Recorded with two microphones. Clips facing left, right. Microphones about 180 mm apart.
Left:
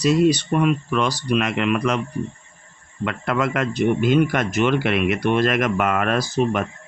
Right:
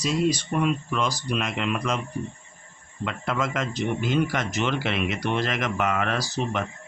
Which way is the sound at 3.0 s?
65° left (ahead or behind).